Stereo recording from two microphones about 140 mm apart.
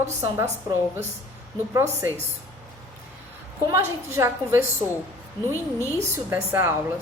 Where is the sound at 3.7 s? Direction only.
20° right (ahead or behind).